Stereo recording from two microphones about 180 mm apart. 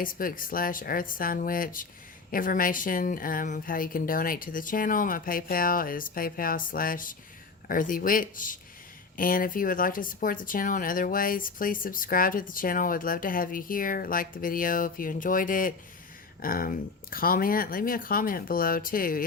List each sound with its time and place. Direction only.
0.0 s speech: 50° left (ahead or behind)